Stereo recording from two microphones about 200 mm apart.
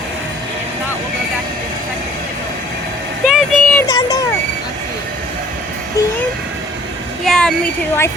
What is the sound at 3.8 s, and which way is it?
Vehicle, 20° left (ahead or behind).